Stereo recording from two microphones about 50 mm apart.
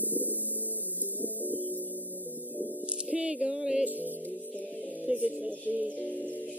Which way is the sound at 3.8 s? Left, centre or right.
Right.